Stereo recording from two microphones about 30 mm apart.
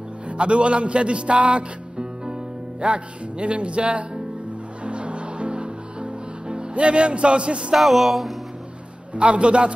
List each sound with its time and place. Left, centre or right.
0.3 s speech: right
4.8 s music: right
7.7 s music: centre
9.1 s speech: right